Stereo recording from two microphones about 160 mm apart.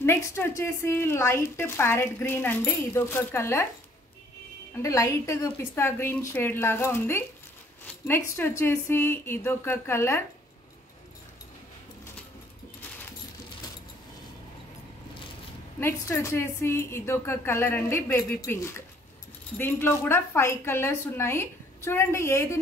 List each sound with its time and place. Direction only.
0.0 s a woman's voice: 15° left (ahead or behind)
4.8 s a woman's voice: 20° left (ahead or behind)
15.8 s a woman's voice: 15° left (ahead or behind)